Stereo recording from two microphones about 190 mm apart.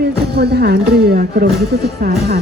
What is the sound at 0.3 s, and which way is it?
Speech, 60° right (ahead or behind).